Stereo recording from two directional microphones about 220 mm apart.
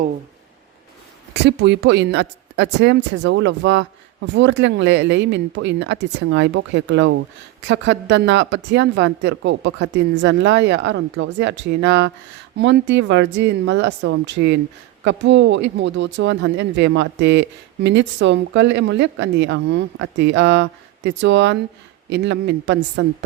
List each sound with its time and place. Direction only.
1.3 s speech: 50° right (ahead or behind)